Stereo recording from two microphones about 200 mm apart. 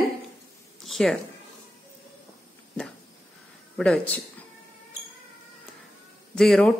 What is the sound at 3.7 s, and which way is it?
Speech, 5° left (ahead or behind).